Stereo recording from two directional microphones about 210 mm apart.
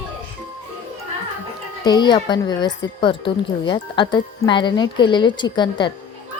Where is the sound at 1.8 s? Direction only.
20° left (ahead or behind).